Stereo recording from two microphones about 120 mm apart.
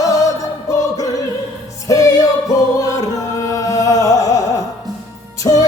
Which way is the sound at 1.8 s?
25° left (ahead or behind).